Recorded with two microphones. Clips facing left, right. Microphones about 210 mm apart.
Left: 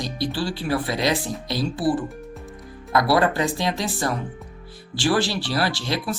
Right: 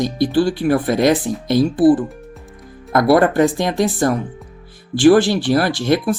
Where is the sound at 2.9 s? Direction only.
50° right (ahead or behind).